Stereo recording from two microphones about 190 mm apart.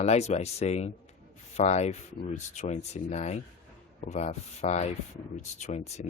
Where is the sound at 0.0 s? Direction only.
35° left (ahead or behind).